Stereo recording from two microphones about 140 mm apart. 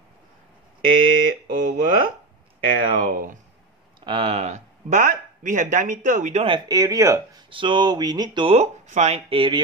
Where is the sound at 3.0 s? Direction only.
80° right.